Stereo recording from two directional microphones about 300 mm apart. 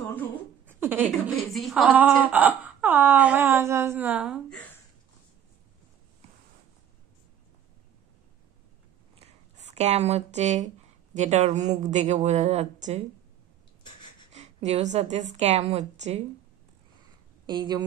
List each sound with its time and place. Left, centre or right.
0.0 s a sound: centre
0.7 s speech: centre
9.2 s a sound: right
11.1 s speech: right
14.3 s a woman's voice: right
17.5 s speech: centre